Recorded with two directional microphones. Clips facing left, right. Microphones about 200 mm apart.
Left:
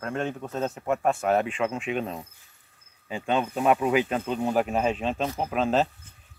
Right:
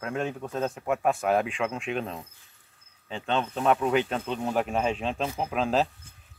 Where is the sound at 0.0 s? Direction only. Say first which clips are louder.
Left 1 dB; 5° right (ahead or behind).